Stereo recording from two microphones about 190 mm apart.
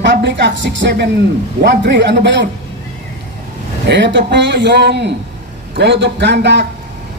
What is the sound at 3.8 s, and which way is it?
A man's voice, 65° right (ahead or behind).